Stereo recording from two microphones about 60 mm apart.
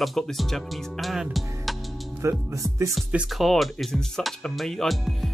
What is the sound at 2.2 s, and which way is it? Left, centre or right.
Speech, right.